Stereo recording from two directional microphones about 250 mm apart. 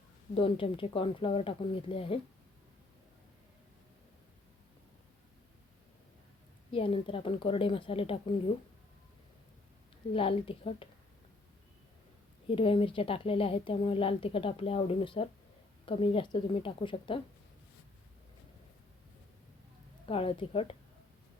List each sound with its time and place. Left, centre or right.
0.3 s a woman's voice: left
6.7 s a woman's voice: left
10.1 s a woman's voice: left
12.5 s a woman's voice: left
20.1 s a woman's voice: left